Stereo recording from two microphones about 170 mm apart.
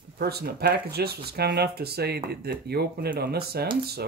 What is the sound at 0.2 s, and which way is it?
Speech, 70° right (ahead or behind).